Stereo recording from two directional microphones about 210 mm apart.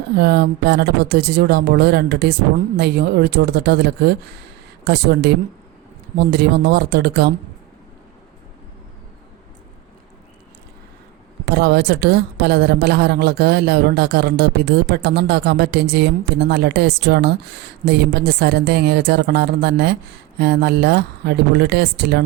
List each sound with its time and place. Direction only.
0.2 s a woman's voice: 50° right (ahead or behind)
11.4 s a woman's voice: 50° right (ahead or behind)